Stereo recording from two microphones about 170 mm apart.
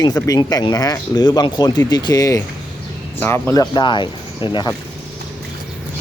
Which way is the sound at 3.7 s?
30° left (ahead or behind).